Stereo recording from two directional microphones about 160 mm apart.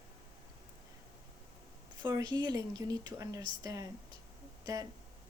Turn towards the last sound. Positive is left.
turn(degrees=-20)  # may be behind; listen again after turning